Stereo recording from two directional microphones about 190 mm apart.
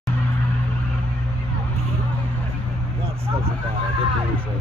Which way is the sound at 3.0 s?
30° right (ahead or behind).